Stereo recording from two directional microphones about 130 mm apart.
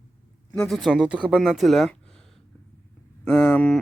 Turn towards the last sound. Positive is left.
turn(degrees=10)  # may be behind; listen again after turning